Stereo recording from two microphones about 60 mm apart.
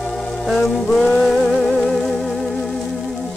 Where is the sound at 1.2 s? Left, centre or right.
Centre.